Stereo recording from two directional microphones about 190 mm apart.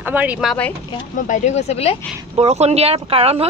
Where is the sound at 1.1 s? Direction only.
40° left (ahead or behind).